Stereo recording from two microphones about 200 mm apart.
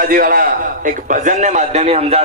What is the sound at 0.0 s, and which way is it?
A man's voice, 45° right (ahead or behind).